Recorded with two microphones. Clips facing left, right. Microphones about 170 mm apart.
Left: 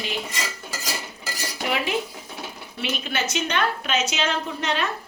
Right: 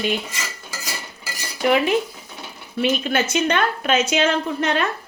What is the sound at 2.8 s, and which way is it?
A woman's voice, 50° right (ahead or behind).